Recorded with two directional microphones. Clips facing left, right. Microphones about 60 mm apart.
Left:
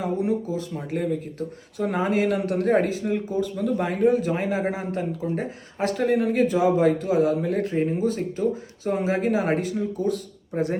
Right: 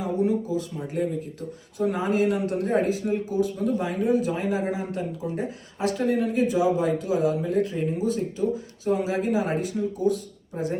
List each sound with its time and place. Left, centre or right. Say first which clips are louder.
0.0 s speech: even; left